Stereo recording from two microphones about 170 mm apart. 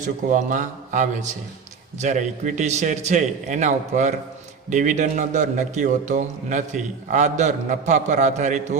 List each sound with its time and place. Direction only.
0.0 s a man's voice: 50° right (ahead or behind)